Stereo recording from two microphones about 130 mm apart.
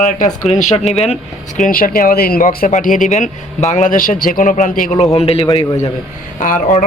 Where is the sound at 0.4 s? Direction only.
60° left (ahead or behind).